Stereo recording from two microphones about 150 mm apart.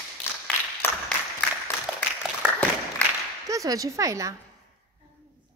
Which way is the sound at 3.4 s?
20° right (ahead or behind).